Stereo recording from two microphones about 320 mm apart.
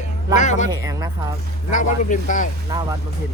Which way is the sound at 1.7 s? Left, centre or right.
Left.